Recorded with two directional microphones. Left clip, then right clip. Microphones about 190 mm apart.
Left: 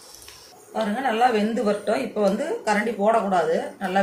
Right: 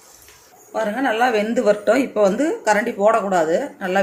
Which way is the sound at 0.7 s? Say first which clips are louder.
Right 4 dB; 55° right (ahead or behind).